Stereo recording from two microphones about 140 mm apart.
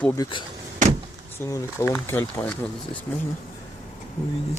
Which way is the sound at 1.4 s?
15° left (ahead or behind).